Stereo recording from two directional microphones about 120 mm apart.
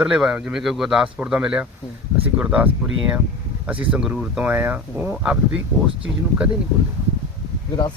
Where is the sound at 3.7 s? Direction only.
10° right (ahead or behind).